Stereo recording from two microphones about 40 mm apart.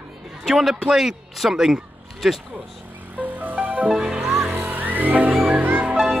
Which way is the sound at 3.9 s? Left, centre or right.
Centre.